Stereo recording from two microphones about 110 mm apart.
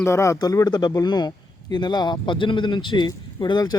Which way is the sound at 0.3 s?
35° left (ahead or behind).